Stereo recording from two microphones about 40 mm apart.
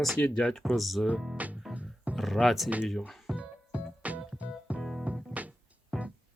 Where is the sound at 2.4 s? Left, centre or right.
Centre.